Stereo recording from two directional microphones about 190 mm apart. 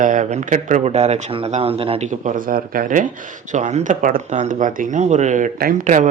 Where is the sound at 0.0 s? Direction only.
40° right (ahead or behind).